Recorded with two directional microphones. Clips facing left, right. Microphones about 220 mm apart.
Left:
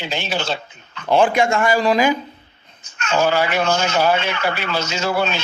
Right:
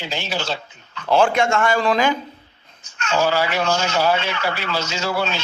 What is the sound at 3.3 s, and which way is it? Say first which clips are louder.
Speech: left 3 dB; 55° left (ahead or behind).